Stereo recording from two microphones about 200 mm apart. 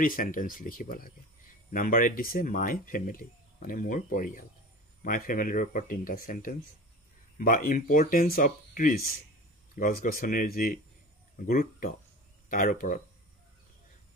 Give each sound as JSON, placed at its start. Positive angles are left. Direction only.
{"t": 0.0, "sound": "speech", "side_deg": 45}